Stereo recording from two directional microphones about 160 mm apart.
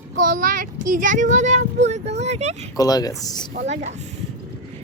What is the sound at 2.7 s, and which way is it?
Speech, 25° left (ahead or behind).